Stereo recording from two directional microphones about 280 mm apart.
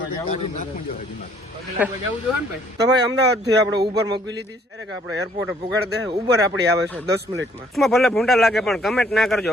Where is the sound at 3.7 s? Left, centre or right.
Centre.